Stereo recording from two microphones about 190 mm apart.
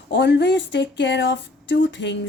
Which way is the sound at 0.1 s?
65° left (ahead or behind).